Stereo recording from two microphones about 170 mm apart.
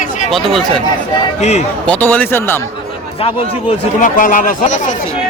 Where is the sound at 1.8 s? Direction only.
10° left (ahead or behind).